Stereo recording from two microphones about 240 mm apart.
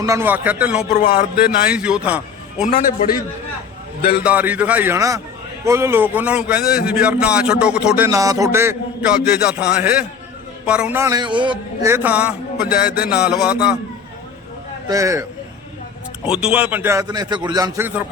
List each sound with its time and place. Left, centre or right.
0.0 s a man's voice: centre
0.9 s speech: left
1.6 s a man's voice: centre
2.6 s speech: left
4.2 s a man's voice: centre
14.8 s a man's voice: centre
16.2 s a man's voice: centre